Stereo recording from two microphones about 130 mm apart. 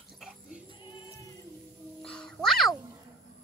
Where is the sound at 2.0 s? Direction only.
5° left (ahead or behind).